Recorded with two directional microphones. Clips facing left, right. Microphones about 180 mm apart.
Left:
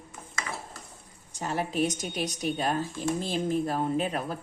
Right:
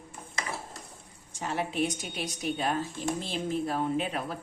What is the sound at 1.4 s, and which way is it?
A woman's voice, 40° left (ahead or behind).